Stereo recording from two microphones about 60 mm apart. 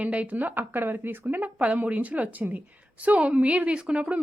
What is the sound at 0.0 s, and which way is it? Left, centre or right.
Speech, right.